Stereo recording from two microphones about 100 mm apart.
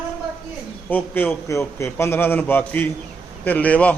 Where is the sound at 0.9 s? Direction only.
20° left (ahead or behind).